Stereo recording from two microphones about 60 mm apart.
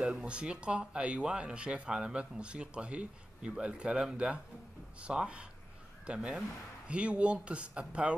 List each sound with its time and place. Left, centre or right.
0.0 s speech: centre